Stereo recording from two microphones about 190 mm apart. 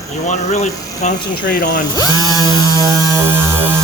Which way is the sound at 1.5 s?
60° left (ahead or behind).